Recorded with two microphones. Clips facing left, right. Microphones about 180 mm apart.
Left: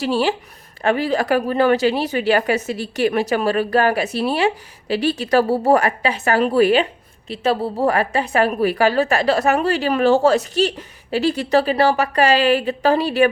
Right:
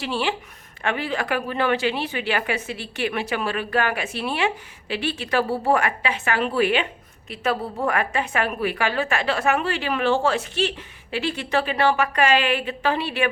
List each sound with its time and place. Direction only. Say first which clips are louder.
0.0 s speech: left 6 dB; 40° left (ahead or behind)